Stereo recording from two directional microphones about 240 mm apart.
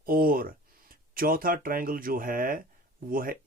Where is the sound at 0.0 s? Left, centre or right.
Right.